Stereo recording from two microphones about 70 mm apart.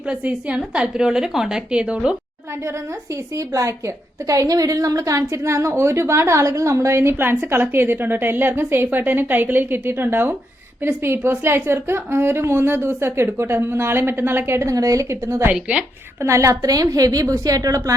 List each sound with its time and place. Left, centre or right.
0.1 s a woman's voice: centre
3.3 s a woman's voice: right
15.7 s a woman's voice: centre
16.2 s a woman's voice: right